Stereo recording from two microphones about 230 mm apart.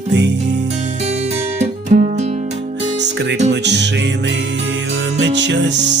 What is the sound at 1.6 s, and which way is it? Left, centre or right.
Music, right.